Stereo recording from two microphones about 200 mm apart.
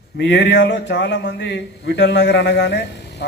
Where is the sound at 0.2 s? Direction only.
60° left (ahead or behind).